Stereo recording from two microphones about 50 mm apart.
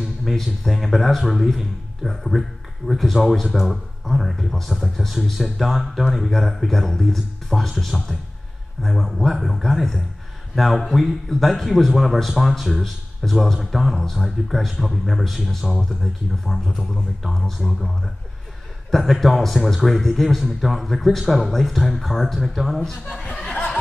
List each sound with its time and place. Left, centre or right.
0.2 s a man's voice: centre
3.7 s a man's voice: centre
18.9 s a man's voice: centre
23.5 s a sound: left